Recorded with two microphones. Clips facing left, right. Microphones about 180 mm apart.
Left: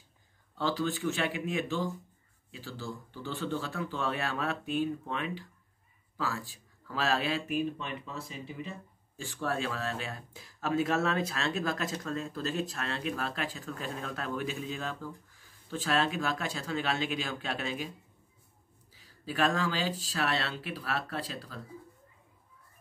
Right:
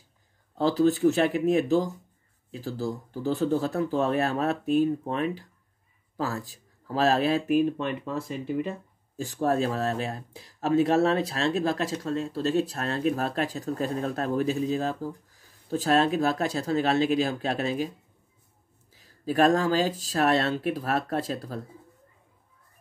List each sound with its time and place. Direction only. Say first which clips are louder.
0.6 s speech: right 9 dB; 40° right (ahead or behind)
18.9 s speech: right 8 dB; 45° right (ahead or behind)